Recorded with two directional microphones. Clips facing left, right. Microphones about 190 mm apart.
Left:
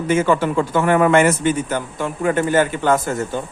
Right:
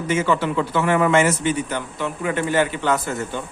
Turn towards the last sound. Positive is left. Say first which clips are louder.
# left 4 dB
turn(degrees=45)  # may be behind; listen again after turning